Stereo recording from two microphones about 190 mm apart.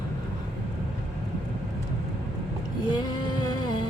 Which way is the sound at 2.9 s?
20° left (ahead or behind).